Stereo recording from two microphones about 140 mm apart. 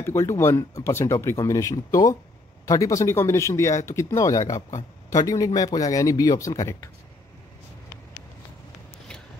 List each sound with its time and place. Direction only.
0.0 s speech: 20° left (ahead or behind)